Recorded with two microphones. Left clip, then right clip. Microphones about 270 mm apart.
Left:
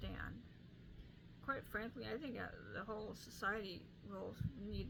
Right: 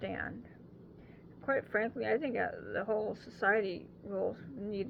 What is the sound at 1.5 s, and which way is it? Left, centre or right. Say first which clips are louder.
Speech: right 12 dB; left.